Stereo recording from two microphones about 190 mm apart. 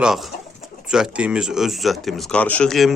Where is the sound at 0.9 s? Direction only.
5° right (ahead or behind).